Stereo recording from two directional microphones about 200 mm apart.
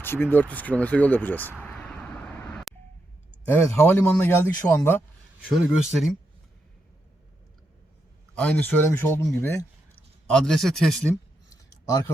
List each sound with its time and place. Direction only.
0.0 s speech: 10° left (ahead or behind)
1.6 s vehicle: 5° left (ahead or behind)
3.4 s speech: 10° left (ahead or behind)
5.8 s speech: centre (ahead or behind)
8.4 s speech: 5° left (ahead or behind)
11.4 s a sound: 20° left (ahead or behind)